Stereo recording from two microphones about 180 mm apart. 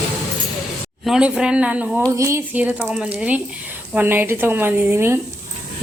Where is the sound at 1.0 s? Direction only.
5° right (ahead or behind).